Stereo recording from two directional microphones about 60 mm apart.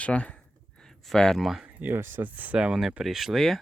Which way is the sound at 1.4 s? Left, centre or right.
Centre.